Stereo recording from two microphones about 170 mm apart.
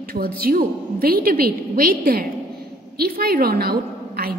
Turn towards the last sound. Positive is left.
turn(degrees=-65)  # may be behind; listen again after turning